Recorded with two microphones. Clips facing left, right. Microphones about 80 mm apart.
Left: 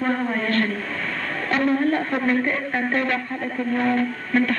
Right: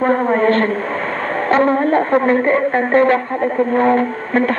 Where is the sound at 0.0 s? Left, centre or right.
Right.